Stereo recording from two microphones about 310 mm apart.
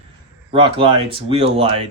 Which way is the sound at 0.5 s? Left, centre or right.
Centre.